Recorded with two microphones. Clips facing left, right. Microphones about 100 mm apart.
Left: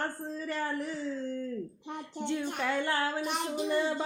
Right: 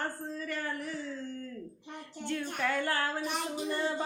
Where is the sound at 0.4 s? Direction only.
30° left (ahead or behind).